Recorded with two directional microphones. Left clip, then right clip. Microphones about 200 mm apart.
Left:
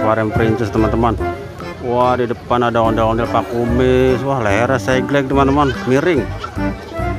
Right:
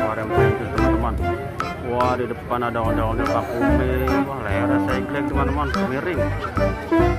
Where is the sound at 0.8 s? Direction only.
Centre (ahead or behind).